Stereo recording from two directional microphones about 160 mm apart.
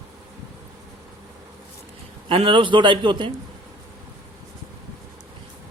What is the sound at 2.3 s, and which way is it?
Speech, 35° right (ahead or behind).